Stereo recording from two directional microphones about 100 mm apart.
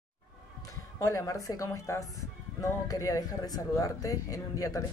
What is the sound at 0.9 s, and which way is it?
Speech, 35° left (ahead or behind).